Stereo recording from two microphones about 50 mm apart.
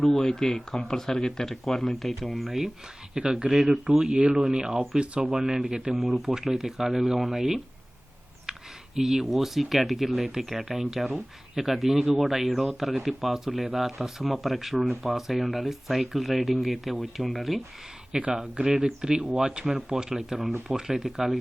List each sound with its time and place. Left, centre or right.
0.0 s speech: centre
3.2 s speech: centre
4.9 s speech: right
6.0 s speech: centre
8.5 s computer keyboard: centre
9.0 s speech: centre
18.1 s speech: centre